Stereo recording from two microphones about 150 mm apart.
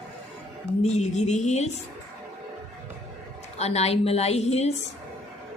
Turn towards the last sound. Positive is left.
turn(degrees=45)  # may be behind; listen again after turning